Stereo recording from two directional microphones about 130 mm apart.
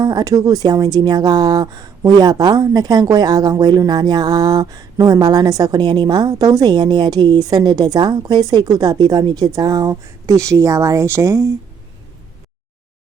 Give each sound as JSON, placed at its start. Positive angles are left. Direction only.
{"t": 0.0, "sound": "speech", "side_deg": -30}